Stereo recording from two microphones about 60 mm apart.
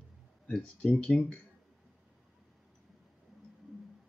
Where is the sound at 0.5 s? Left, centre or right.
Centre.